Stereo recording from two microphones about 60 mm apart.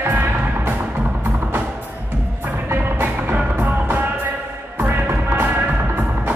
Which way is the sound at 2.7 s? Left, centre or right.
Right.